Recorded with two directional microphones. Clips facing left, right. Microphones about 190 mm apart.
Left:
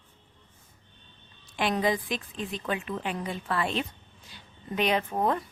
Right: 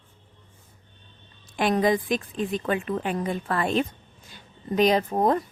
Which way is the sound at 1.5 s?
45° right (ahead or behind).